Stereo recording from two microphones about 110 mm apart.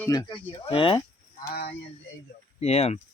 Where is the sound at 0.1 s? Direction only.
35° left (ahead or behind).